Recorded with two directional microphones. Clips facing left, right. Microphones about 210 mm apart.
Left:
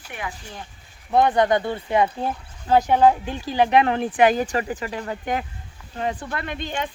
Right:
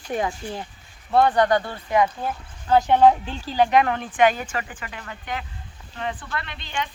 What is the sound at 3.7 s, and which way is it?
A woman's voice, 25° left (ahead or behind).